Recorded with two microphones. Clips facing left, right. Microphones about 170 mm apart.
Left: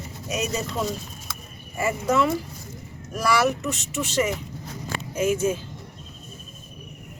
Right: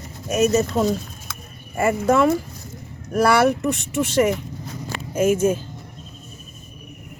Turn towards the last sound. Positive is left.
turn(degrees=-50)  # may be behind; listen again after turning